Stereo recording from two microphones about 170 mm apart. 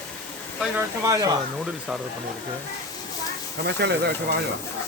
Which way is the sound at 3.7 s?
80° right.